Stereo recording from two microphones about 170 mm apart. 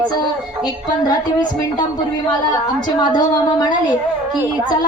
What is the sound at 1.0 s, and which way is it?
Speech, 25° left (ahead or behind).